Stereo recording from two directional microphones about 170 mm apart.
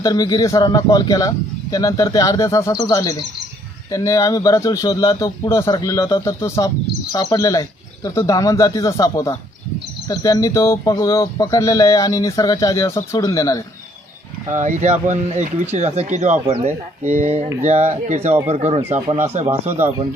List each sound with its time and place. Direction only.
0.0 s speech: 25° left (ahead or behind)
14.5 s speech: 45° right (ahead or behind)
19.6 s speech: 15° right (ahead or behind)